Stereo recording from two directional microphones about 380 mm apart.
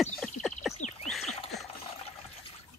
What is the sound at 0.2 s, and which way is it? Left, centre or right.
Bird, centre.